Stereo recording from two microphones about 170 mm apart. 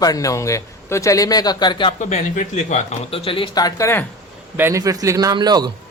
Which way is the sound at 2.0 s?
45° left (ahead or behind).